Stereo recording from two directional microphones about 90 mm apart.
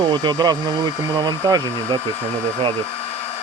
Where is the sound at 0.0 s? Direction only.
60° right (ahead or behind).